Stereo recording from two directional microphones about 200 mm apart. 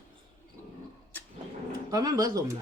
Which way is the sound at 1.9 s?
15° right (ahead or behind).